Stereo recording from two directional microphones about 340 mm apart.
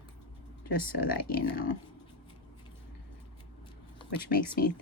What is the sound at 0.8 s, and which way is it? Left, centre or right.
Speech, left.